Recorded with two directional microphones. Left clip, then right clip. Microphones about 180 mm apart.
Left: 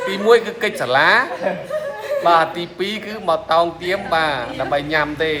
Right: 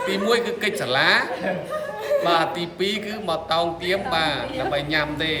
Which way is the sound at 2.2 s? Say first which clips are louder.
Left 10 dB; 25° left (ahead or behind).